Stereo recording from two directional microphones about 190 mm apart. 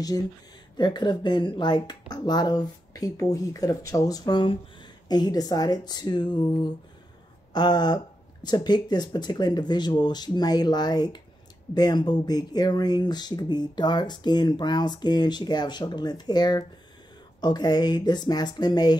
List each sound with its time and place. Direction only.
0.7 s speech: 25° left (ahead or behind)